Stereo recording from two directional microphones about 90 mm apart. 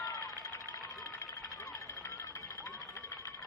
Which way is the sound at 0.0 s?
45° left (ahead or behind).